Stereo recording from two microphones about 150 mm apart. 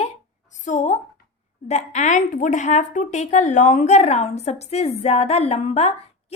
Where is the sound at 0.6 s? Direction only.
55° left (ahead or behind).